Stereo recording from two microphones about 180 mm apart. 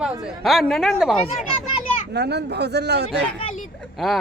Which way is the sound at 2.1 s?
65° right (ahead or behind).